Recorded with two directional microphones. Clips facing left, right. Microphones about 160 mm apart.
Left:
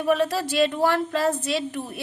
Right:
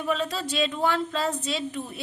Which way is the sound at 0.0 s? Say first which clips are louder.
Left 6 dB; 60° left (ahead or behind).